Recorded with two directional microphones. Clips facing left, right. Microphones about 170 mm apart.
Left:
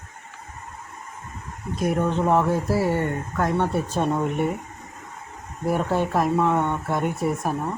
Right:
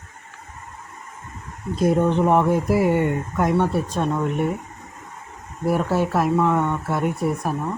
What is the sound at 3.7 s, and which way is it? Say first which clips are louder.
Speech: right 1 dB; centre (ahead or behind).